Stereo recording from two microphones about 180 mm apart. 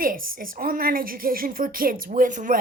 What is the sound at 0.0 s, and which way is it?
A woman's voice, 50° right (ahead or behind).